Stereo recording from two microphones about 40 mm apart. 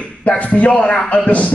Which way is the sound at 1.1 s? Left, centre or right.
Left.